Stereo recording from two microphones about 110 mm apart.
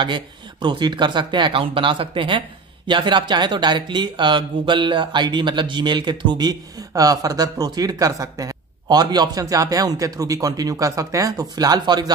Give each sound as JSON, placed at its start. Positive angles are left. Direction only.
{"t": 0.0, "sound": "speech", "side_deg": -45}